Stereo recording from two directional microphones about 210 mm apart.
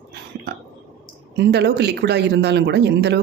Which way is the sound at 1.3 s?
50° right (ahead or behind).